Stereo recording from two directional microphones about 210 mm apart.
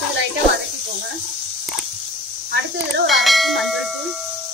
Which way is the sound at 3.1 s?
Centre (ahead or behind).